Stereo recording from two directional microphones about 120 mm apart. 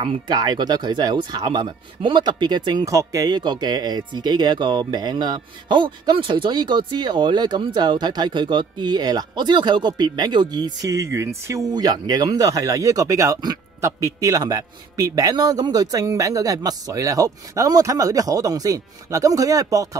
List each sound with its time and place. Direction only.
0.3 s speech: 35° right (ahead or behind)
2.8 s a man's voice: 25° right (ahead or behind)